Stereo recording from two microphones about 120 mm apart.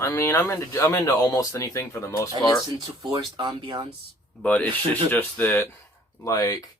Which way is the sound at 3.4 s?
40° right (ahead or behind).